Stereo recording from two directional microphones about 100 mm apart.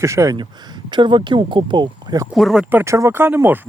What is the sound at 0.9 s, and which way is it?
Speech, 50° right (ahead or behind).